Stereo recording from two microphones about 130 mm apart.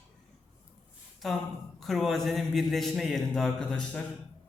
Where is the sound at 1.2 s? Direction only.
Centre (ahead or behind).